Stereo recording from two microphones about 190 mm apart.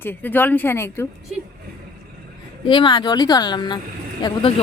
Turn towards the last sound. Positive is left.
turn(degrees=25)  # may be behind; listen again after turning